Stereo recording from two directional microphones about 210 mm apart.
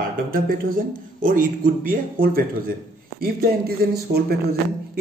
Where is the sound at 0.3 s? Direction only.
40° right (ahead or behind).